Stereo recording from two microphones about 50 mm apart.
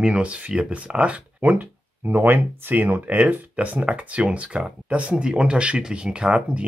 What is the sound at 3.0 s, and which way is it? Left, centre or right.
Speech, right.